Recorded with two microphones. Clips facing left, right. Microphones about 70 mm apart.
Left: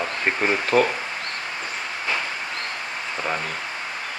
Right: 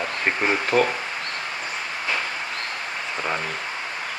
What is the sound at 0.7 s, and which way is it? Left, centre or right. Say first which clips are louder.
Speech: left 1 dB; left.